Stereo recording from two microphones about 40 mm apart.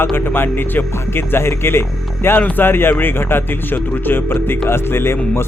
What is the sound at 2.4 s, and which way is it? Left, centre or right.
Speech, left.